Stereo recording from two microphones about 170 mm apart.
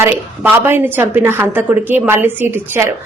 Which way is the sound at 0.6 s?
10° right (ahead or behind).